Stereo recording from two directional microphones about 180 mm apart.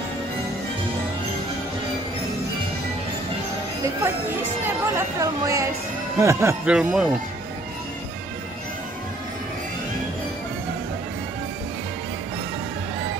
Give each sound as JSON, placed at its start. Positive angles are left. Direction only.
{"t": 4.0, "sound": "speech", "side_deg": -10}